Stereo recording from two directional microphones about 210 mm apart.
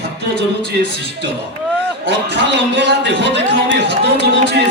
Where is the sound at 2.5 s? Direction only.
55° right (ahead or behind).